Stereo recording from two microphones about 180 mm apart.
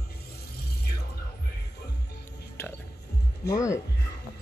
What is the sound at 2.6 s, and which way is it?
Music, 15° left (ahead or behind).